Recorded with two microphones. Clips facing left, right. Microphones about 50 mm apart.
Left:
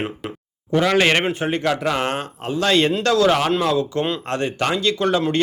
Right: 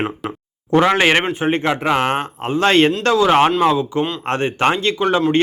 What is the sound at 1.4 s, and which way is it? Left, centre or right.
Speech, right.